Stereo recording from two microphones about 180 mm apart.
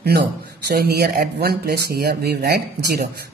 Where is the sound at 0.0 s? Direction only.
65° right (ahead or behind).